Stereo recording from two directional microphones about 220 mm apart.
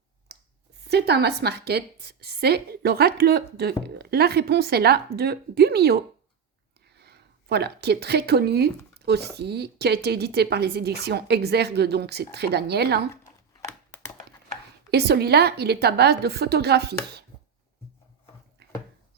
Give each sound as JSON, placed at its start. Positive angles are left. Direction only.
{"t": 0.3, "sound": "a sound", "side_deg": -45}
{"t": 0.9, "sound": "speech", "side_deg": -50}
{"t": 14.8, "sound": "speech", "side_deg": -45}